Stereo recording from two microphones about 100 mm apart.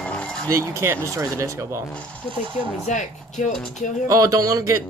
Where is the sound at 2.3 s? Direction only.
55° right (ahead or behind).